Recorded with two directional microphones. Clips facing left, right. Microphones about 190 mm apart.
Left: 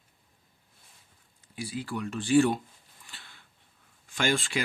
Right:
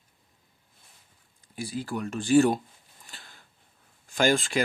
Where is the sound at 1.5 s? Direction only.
40° right (ahead or behind).